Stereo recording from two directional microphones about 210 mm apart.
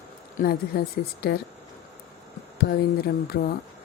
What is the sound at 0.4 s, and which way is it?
Speech, 40° left (ahead or behind).